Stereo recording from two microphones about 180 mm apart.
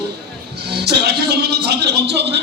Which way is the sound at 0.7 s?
65° right (ahead or behind).